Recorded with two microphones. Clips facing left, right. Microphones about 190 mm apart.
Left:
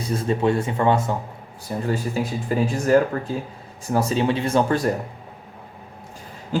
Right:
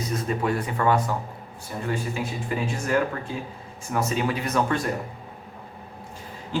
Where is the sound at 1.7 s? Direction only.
35° left (ahead or behind).